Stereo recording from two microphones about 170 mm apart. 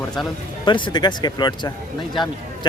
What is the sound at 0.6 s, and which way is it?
Speech, 30° left (ahead or behind).